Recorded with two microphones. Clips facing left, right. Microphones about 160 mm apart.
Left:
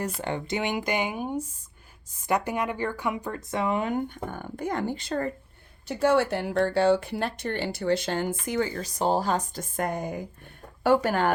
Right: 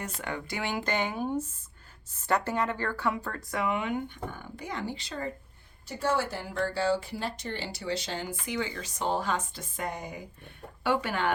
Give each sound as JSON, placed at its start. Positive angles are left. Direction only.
{"t": 0.2, "sound": "speech", "side_deg": 30}
{"t": 5.9, "sound": "speech", "side_deg": 70}